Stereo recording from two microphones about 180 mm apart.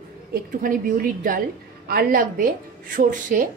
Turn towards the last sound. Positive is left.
turn(degrees=-50)  # may be behind; listen again after turning